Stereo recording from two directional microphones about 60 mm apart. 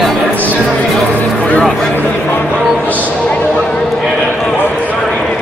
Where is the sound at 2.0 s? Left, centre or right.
Left.